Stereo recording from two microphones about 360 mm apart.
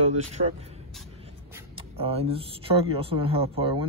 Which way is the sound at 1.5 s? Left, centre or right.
Centre.